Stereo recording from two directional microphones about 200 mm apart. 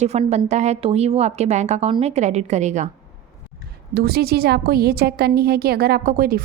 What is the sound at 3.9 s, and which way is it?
A woman's voice, 50° right (ahead or behind).